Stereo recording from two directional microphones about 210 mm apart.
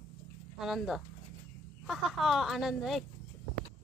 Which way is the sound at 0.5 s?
Centre (ahead or behind).